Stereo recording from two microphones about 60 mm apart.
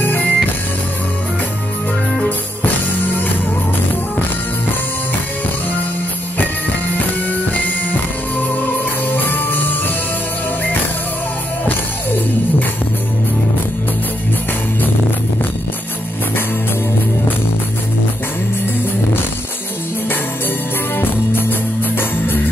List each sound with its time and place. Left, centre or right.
0.0 s music: left
2.2 s music: left
8.5 s music: left
20.9 s music: left